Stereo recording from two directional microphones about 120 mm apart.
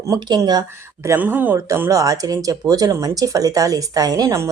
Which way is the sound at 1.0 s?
20° right (ahead or behind).